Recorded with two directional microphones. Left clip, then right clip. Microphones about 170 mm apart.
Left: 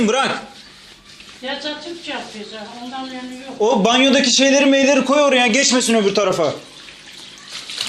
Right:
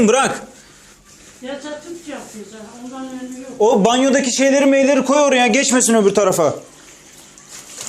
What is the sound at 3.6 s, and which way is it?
A man's voice, 35° right (ahead or behind).